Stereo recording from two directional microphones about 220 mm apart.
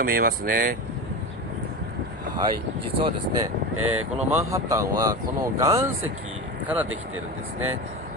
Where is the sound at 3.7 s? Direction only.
75° right (ahead or behind).